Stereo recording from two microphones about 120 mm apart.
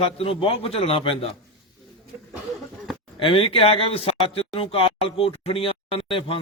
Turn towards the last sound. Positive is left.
turn(degrees=50)  # may be behind; listen again after turning